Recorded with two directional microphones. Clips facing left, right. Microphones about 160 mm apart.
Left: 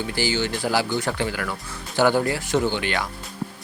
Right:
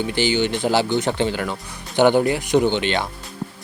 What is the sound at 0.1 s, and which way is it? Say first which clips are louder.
Speech: right 4 dB; 20° right (ahead or behind).